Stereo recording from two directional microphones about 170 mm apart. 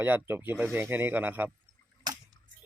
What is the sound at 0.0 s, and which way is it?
Speech, 10° right (ahead or behind).